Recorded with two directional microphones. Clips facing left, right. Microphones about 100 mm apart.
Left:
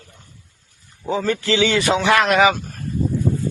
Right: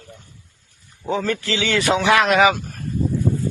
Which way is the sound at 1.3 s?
20° left (ahead or behind).